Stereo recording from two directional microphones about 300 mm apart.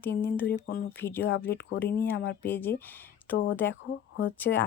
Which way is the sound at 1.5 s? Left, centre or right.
Left.